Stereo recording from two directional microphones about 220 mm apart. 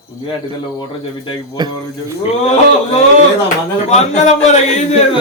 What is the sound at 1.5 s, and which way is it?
Speech, 20° right (ahead or behind).